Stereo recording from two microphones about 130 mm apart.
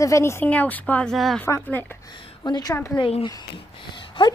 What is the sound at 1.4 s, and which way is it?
Speech, 15° left (ahead or behind).